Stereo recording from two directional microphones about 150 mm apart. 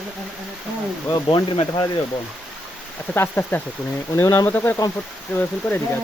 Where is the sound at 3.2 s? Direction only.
10° left (ahead or behind).